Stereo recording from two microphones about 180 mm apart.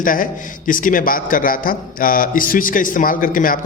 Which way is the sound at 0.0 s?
50° left (ahead or behind).